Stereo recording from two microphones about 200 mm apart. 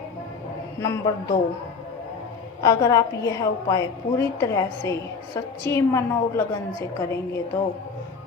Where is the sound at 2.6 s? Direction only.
15° left (ahead or behind).